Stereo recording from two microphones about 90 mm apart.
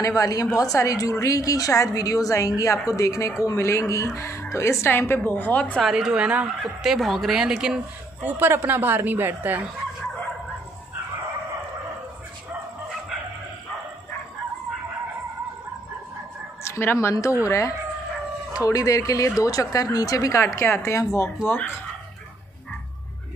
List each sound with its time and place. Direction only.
0.0 s speech: 40° left (ahead or behind); by 5.8 s 15° left (ahead or behind)
5.8 s speech: 5° right (ahead or behind)
8.2 s speech: 20° right (ahead or behind)
16.6 s speech: 25° left (ahead or behind)
21.5 s speech: 25° left (ahead or behind)